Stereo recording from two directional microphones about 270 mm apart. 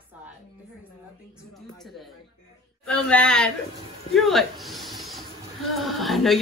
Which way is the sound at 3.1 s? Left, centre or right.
Centre.